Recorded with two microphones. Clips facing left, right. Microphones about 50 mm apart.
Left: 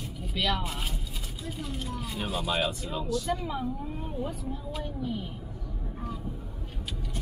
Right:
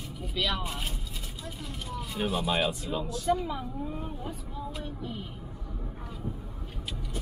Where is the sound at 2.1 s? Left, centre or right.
Centre.